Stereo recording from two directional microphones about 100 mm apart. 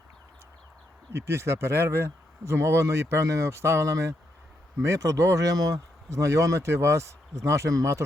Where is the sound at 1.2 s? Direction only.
25° right (ahead or behind).